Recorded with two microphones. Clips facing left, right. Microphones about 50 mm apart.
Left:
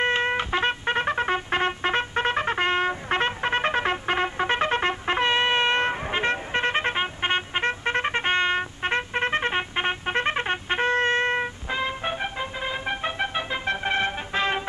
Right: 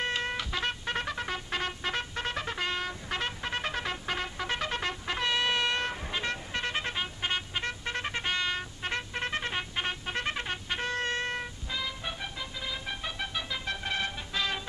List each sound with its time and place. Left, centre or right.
0.0 s trumpet: left